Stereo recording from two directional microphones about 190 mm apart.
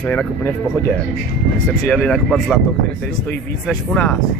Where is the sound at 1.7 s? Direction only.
5° left (ahead or behind).